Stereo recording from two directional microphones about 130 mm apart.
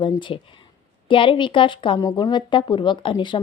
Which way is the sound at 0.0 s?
40° left (ahead or behind).